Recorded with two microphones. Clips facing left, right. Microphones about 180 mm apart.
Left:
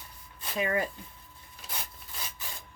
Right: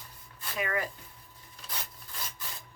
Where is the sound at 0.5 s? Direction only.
25° left (ahead or behind).